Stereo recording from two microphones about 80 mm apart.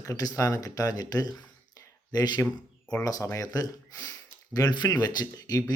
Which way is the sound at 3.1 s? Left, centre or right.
Left.